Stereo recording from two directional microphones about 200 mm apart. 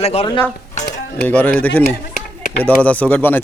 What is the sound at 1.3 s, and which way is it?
A man's voice, 10° left (ahead or behind).